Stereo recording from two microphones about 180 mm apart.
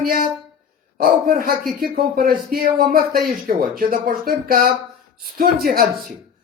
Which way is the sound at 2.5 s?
55° right (ahead or behind).